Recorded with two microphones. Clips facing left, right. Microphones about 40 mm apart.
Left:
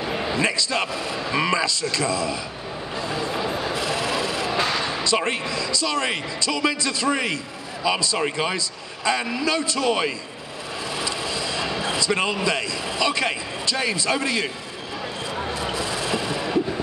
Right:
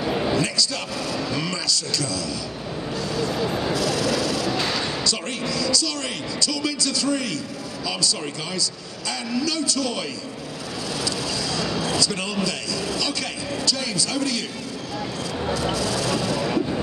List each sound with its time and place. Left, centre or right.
0.0 s a sound: centre
0.4 s speech: left
3.0 s vehicle: left
3.7 s a man's voice: left
11.0 s vehicle: left
15.5 s a sound: left